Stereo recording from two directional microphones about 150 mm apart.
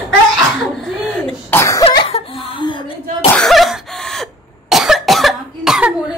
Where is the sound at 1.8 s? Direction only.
40° left (ahead or behind).